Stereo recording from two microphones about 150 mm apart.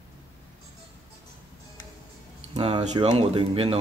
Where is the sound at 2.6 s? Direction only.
45° right (ahead or behind).